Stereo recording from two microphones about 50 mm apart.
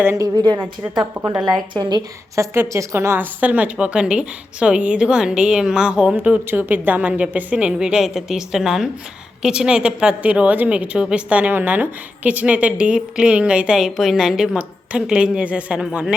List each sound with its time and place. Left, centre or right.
0.0 s a woman's voice: right
1.2 s a woman's voice: centre
2.3 s a woman's voice: right
2.9 s a woman's voice: right
3.2 s a woman's voice: right
6.1 s a woman's voice: right
6.5 s a woman's voice: right
6.7 s a woman's voice: right
7.5 s a woman's voice: centre
11.5 s a woman's voice: right
13.7 s a woman's voice: centre